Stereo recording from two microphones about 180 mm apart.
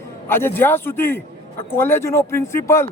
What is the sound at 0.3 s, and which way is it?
A man's voice, 10° left (ahead or behind).